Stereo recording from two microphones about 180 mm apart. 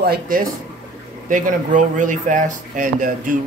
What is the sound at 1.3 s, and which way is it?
Speech, 45° right (ahead or behind).